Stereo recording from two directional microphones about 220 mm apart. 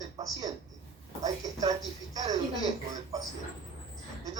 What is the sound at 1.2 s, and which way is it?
Speech, 15° right (ahead or behind).